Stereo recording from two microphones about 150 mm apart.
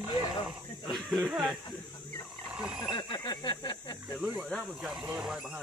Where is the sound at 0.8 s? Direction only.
Centre (ahead or behind).